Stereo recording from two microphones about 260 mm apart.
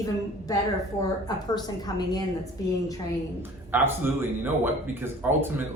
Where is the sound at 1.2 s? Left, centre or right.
Centre.